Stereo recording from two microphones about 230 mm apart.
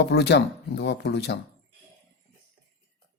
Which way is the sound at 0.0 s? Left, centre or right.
Left.